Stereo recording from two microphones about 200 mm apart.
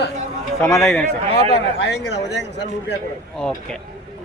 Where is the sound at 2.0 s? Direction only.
60° left (ahead or behind).